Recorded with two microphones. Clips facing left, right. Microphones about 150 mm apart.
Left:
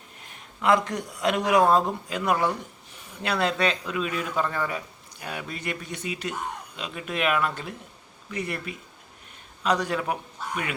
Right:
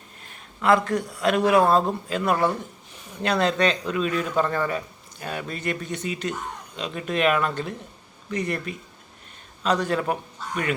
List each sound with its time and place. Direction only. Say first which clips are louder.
0.9 s speech: right 3 dB; 20° left (ahead or behind)